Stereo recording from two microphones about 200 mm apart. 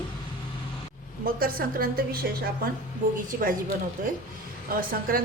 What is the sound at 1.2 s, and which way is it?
Speech, 45° right (ahead or behind).